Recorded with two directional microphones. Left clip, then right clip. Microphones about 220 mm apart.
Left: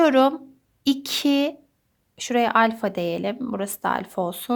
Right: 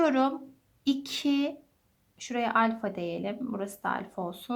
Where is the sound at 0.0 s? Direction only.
40° left (ahead or behind).